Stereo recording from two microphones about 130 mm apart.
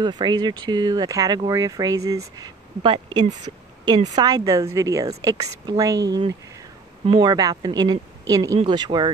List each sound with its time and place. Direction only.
0.0 s a woman's voice: 35° right (ahead or behind)